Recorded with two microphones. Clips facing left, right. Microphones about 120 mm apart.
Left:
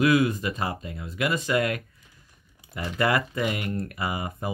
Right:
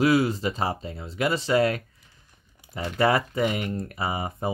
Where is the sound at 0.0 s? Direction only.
30° right (ahead or behind).